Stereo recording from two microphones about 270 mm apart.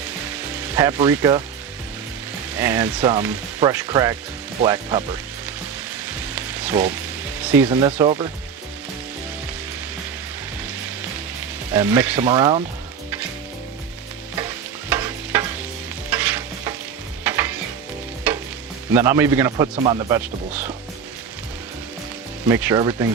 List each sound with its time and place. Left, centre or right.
0.5 s speech: centre
2.6 s speech: centre
6.1 s sizzle: centre
7.3 s speech: centre
11.7 s speech: centre
14.8 s stir: centre
18.9 s speech: centre
22.4 s speech: centre